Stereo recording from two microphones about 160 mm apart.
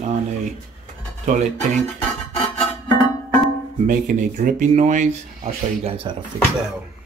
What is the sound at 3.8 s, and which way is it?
Speech, 50° right (ahead or behind).